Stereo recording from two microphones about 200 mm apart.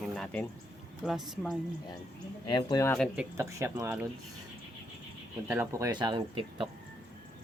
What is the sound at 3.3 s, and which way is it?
Speech, 15° right (ahead or behind).